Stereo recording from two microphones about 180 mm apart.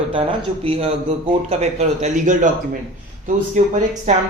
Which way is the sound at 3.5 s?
45° right (ahead or behind).